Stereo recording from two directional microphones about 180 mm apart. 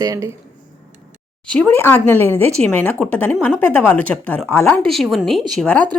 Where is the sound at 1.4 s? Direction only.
5° left (ahead or behind).